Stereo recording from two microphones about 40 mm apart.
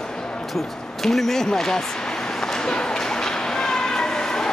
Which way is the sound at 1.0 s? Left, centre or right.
Centre.